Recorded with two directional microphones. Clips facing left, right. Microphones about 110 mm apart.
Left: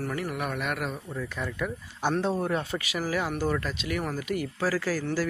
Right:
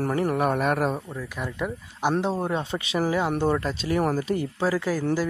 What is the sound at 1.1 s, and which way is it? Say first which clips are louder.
Speech: right 1 dB; 10° right (ahead or behind).